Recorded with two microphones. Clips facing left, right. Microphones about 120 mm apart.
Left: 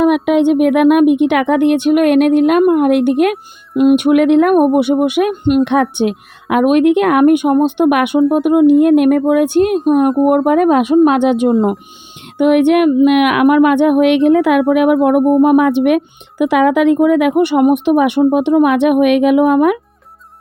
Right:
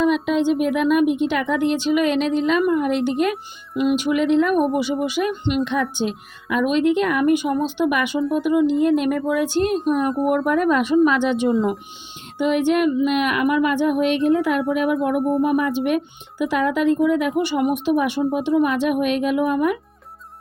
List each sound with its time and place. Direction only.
0.0 s speech: 65° left (ahead or behind)